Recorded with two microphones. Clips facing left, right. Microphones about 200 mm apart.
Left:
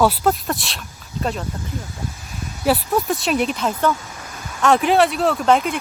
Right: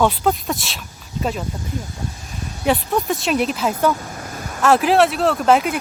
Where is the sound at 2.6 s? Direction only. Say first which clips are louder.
Even; 5° left (ahead or behind).